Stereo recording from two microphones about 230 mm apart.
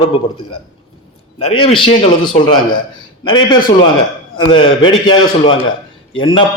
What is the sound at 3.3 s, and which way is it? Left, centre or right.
A man's voice, left.